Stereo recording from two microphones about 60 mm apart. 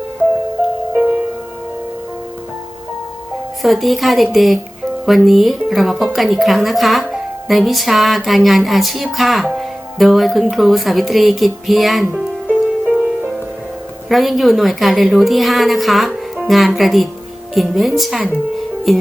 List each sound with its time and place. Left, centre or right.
3.6 s speech: centre
12.5 s music: centre
14.1 s speech: centre